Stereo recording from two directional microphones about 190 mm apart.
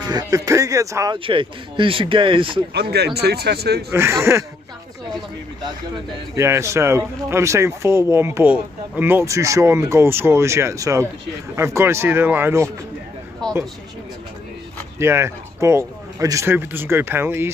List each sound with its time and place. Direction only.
0.0 s speech: 20° right (ahead or behind)
2.7 s speech: 60° right (ahead or behind)
3.9 s speech: 15° right (ahead or behind)
6.3 s speech: 15° right (ahead or behind)
15.0 s speech: 15° right (ahead or behind)